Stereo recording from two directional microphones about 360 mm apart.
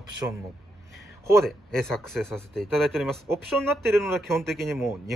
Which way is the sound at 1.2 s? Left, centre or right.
Centre.